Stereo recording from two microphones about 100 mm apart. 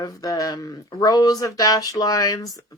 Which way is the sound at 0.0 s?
35° left (ahead or behind).